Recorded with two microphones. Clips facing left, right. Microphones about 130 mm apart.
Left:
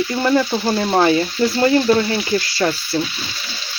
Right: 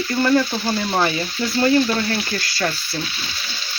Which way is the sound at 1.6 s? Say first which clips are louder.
Left 2 dB; 20° left (ahead or behind).